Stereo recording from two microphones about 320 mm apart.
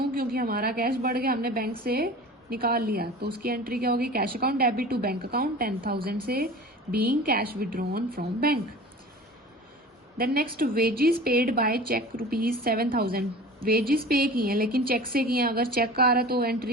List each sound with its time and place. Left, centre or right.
0.1 s a woman's voice: right
10.2 s a woman's voice: right